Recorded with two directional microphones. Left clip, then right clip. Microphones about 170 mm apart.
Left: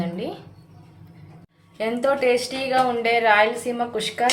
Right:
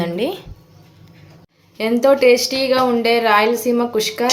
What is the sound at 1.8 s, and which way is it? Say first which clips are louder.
Speech: right 8 dB; 45° right (ahead or behind).